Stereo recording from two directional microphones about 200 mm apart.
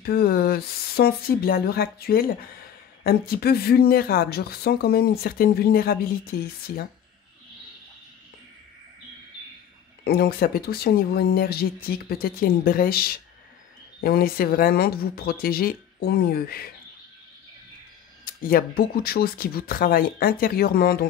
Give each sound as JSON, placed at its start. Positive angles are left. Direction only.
{"t": 0.0, "sound": "speech", "side_deg": 50}
{"t": 10.0, "sound": "speech", "side_deg": 50}
{"t": 18.2, "sound": "speech", "side_deg": 45}